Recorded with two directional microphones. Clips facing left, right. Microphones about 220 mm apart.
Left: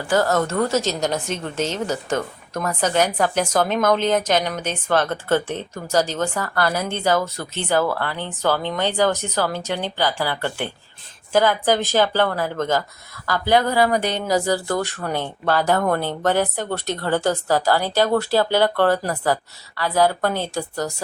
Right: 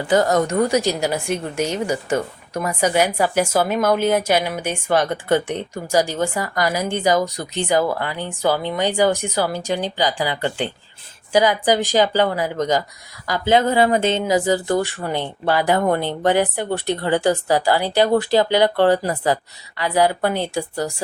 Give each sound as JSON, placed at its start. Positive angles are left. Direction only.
{"t": 0.1, "sound": "a woman's voice", "side_deg": -15}